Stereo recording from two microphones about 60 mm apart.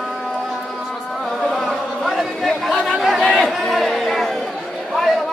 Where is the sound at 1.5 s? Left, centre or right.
Centre.